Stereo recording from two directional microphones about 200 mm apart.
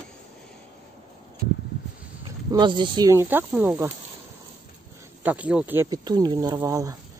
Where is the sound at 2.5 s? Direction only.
25° right (ahead or behind).